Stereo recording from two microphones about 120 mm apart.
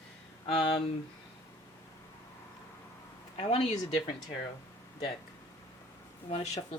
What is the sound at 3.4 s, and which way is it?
Speech, 65° left (ahead or behind).